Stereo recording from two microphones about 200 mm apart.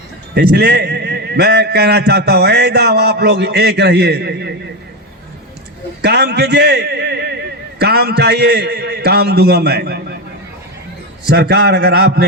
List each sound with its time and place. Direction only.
0.3 s a man's voice: 55° right (ahead or behind)
6.0 s a man's voice: 55° right (ahead or behind)
11.3 s a man's voice: 55° right (ahead or behind)